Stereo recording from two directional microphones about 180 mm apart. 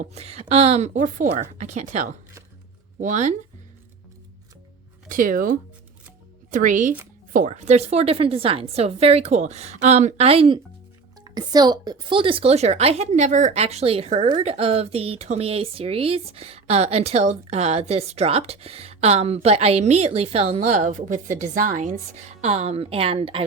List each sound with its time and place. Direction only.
0.0 s speech: 35° right (ahead or behind)
5.0 s speech: 50° right (ahead or behind); by 23.4 s 30° right (ahead or behind)